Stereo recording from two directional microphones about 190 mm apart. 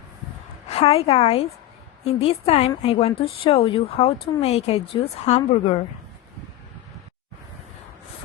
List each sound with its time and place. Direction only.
0.7 s a woman's voice: 30° left (ahead or behind)